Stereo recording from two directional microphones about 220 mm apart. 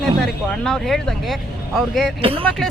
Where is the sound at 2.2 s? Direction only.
25° right (ahead or behind).